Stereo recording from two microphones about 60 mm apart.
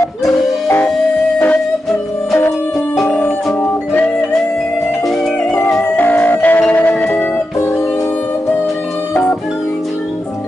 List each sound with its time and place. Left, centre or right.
3.1 s music: left
5.9 s music: left